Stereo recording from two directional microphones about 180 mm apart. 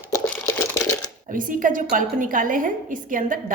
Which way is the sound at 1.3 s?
50° right (ahead or behind).